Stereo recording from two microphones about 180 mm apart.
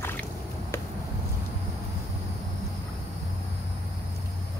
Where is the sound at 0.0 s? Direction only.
10° left (ahead or behind).